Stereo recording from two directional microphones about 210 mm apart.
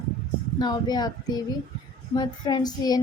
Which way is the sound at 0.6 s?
20° left (ahead or behind).